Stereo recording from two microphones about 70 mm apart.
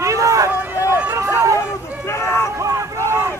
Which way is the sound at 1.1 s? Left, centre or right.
Right.